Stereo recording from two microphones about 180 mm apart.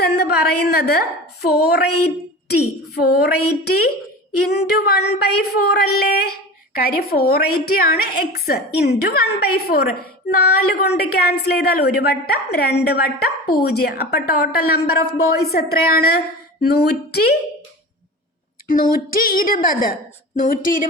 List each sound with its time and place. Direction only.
0.0 s a woman's voice: 60° left (ahead or behind)
4.4 s a woman's voice: 60° left (ahead or behind)
18.7 s a woman's voice: 50° left (ahead or behind)